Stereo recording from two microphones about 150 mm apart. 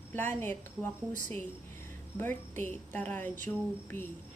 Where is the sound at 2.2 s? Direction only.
15° left (ahead or behind).